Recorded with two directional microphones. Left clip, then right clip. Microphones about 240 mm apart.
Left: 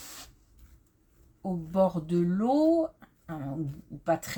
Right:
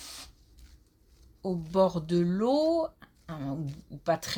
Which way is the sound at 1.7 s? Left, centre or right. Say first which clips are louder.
Right 1 dB; right.